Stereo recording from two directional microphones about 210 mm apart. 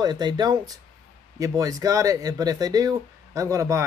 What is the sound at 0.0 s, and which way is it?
Speech, 20° right (ahead or behind).